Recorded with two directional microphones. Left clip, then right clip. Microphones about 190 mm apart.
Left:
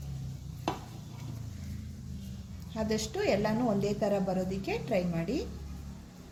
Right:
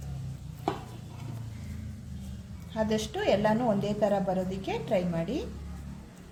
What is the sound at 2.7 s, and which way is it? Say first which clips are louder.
A woman's voice: right 3 dB; 5° left (ahead or behind).